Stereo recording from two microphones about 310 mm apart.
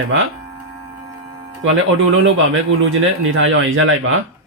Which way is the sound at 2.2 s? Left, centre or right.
Right.